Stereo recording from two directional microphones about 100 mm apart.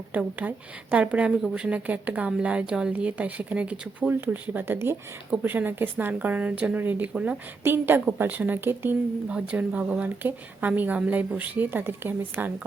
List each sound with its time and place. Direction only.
0.1 s a woman's voice: 15° right (ahead or behind)